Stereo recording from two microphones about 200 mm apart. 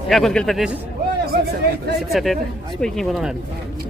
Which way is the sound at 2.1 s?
Centre (ahead or behind).